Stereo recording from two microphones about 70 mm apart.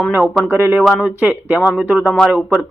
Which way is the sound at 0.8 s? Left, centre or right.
Centre.